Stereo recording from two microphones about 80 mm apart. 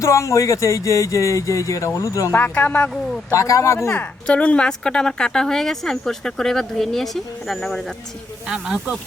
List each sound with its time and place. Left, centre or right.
0.0 s speech: left
2.3 s speech: left
3.3 s speech: left
3.9 s a woman's voice: centre
8.4 s speech: centre